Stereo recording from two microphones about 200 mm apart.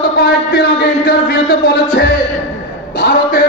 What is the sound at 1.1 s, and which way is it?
A man's voice, 55° left (ahead or behind).